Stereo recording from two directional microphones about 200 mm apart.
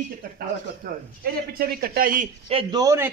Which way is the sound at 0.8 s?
50° right (ahead or behind).